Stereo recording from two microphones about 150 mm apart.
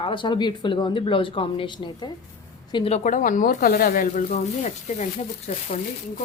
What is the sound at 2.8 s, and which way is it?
Speech, 50° left (ahead or behind).